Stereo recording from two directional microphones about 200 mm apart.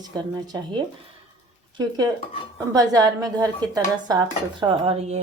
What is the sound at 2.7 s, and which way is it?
A woman's voice, 15° right (ahead or behind).